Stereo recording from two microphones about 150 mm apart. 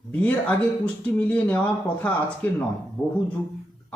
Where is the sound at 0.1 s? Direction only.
10° left (ahead or behind).